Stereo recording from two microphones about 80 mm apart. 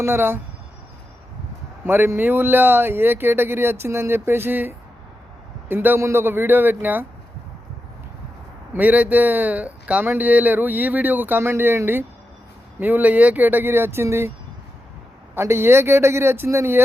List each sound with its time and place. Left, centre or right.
0.0 s speech: right
1.8 s speech: right
8.7 s speech: right
15.4 s a man's voice: right